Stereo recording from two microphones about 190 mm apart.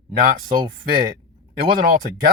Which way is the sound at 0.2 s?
45° right (ahead or behind).